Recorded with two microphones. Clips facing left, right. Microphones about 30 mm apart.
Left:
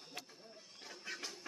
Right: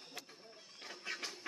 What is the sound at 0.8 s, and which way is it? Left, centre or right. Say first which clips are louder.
Music: right 3 dB; right.